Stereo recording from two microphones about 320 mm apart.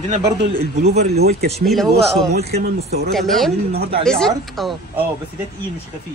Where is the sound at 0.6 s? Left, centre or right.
Right.